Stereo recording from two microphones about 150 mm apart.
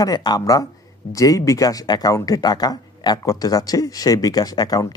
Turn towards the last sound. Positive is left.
turn(degrees=25)  # may be behind; listen again after turning